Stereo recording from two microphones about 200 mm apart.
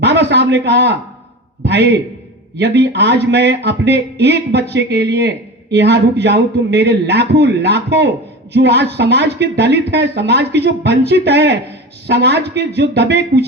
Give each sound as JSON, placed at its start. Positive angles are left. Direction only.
{"t": 0.0, "sound": "a man's voice", "side_deg": -60}